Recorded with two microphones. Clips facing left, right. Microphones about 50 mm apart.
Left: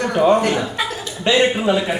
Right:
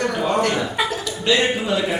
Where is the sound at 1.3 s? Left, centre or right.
Left.